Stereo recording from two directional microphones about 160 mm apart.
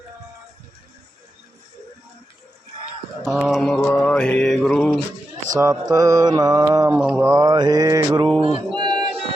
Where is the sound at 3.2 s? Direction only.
Centre (ahead or behind).